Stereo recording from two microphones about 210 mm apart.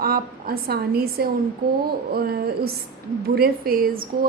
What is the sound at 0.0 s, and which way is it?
A woman's voice, 45° right (ahead or behind).